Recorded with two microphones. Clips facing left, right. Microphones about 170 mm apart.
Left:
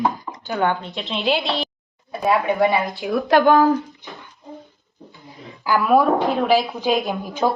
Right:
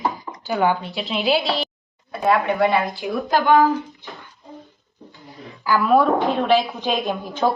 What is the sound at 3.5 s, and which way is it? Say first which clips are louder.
Speech: right 1 dB; 40° left (ahead or behind).